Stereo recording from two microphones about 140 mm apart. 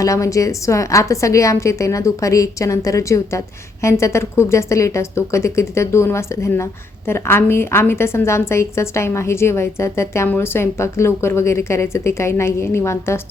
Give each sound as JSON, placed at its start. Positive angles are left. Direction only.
{"t": 0.0, "sound": "a woman's voice", "side_deg": 25}